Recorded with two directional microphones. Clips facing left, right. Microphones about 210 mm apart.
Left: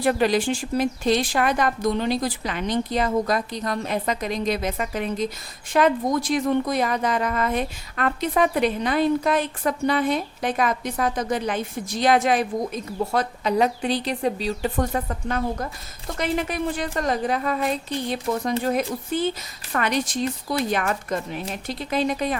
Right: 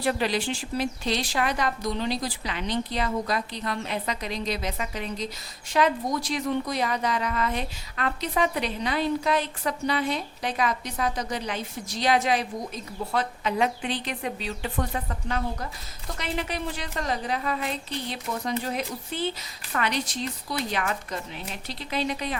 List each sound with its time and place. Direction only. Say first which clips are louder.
0.0 s a woman's voice: left 6 dB; 50° left (ahead or behind)